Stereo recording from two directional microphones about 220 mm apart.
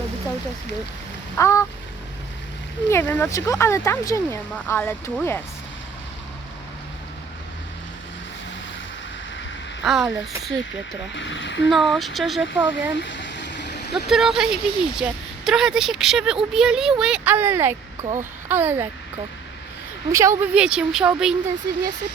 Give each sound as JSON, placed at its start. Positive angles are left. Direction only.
{"t": 1.4, "sound": "speech", "side_deg": 15}
{"t": 2.9, "sound": "speech", "side_deg": 10}
{"t": 9.8, "sound": "a woman's voice", "side_deg": 0}
{"t": 11.2, "sound": "speech", "side_deg": 55}
{"t": 11.7, "sound": "a woman's voice", "side_deg": 0}
{"t": 13.0, "sound": "a sound", "side_deg": 55}
{"t": 14.1, "sound": "a woman's voice", "side_deg": 0}
{"t": 18.0, "sound": "speech", "side_deg": -35}
{"t": 18.4, "sound": "speech", "side_deg": -10}
{"t": 20.1, "sound": "a woman's voice", "side_deg": -15}